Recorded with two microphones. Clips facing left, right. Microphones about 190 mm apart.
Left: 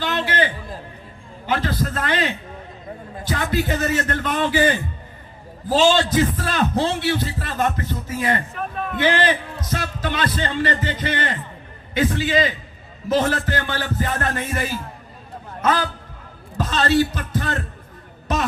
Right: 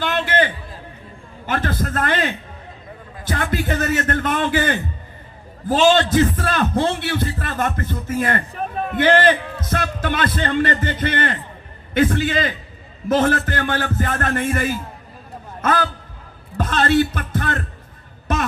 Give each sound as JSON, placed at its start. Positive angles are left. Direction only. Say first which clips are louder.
{"t": 0.0, "sound": "a sound", "louder": "right 2 dB", "side_deg": -50}
{"t": 1.5, "sound": "a man's voice", "louder": "even", "side_deg": -50}
{"t": 16.6, "sound": "speech", "louder": "right 1 dB", "side_deg": -55}